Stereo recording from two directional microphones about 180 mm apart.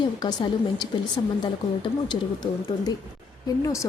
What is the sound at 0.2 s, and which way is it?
Speech, 25° left (ahead or behind).